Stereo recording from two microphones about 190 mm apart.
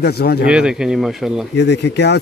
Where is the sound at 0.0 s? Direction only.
55° left (ahead or behind).